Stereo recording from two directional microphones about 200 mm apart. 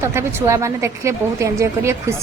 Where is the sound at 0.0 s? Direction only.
15° right (ahead or behind).